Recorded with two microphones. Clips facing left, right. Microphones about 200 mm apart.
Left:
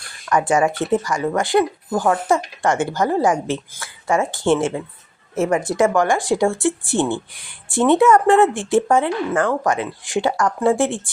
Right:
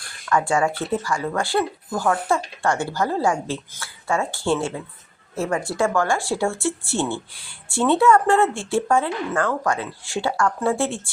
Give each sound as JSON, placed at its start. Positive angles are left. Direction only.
{"t": 0.3, "sound": "a woman's voice", "side_deg": 20}